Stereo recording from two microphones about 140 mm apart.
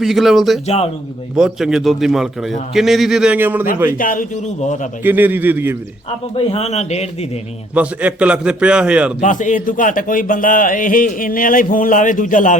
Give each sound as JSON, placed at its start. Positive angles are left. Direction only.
{"t": 0.0, "sound": "a man's voice", "side_deg": 0}
{"t": 3.9, "sound": "speech", "side_deg": 75}
{"t": 5.0, "sound": "a man's voice", "side_deg": -15}
{"t": 6.3, "sound": "a man's voice", "side_deg": 45}
{"t": 7.7, "sound": "a man's voice", "side_deg": -10}
{"t": 9.2, "sound": "speech", "side_deg": 65}